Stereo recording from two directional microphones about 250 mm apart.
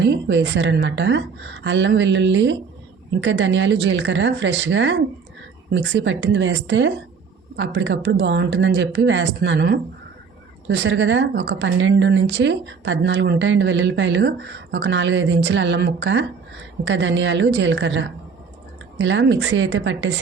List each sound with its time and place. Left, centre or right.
0.0 s speech: right